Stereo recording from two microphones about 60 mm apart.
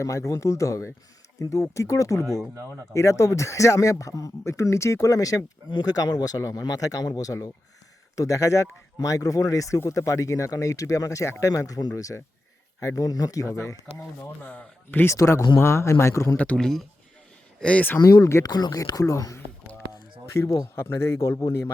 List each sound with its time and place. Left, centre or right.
0.0 s speech: left
5.8 s speech: left
8.1 s speech: left
9.0 s speech: left
13.0 s speech: left
14.0 s speech: left
15.0 s speech: left
16.6 s speech: centre
17.6 s speech: centre
18.0 s speech: left
20.7 s speech: left